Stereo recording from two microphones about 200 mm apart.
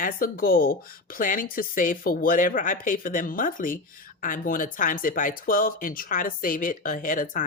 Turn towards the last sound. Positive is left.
turn(degrees=40)  # may be behind; listen again after turning